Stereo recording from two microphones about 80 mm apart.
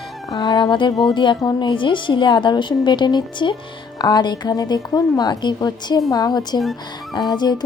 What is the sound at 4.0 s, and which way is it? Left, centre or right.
A woman's voice, left.